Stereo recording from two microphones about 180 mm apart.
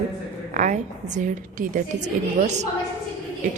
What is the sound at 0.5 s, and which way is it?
A woman's voice, 40° right (ahead or behind).